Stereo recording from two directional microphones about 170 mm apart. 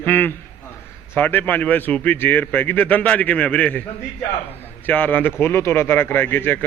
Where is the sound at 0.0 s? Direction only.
10° left (ahead or behind).